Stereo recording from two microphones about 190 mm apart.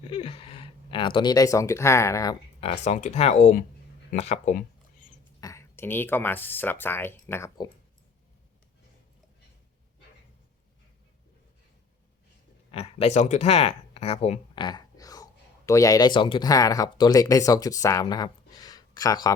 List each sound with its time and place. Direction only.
0.0 s speech: 30° left (ahead or behind)
2.6 s speech: 30° left (ahead or behind)
5.4 s speech: 15° left (ahead or behind)
12.7 s speech: 35° left (ahead or behind)